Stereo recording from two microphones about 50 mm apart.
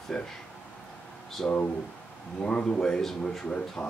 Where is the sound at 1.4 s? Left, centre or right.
Centre.